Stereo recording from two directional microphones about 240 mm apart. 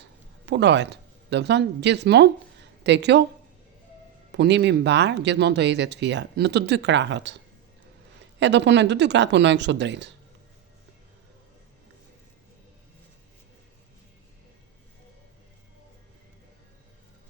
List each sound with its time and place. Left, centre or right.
0.4 s speech: right
4.3 s speech: right
8.4 s speech: right